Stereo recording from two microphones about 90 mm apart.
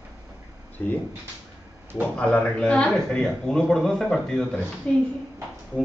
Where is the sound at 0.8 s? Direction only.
15° left (ahead or behind).